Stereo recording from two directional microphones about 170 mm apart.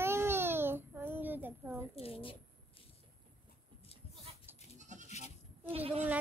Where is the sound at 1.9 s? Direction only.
35° left (ahead or behind).